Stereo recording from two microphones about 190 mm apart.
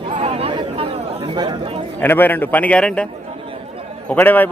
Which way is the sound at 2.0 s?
10° left (ahead or behind).